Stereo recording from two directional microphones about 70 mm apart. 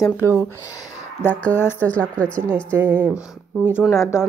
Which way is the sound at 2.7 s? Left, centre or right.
Right.